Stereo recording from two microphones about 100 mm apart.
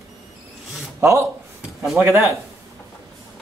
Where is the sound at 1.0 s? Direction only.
30° right (ahead or behind).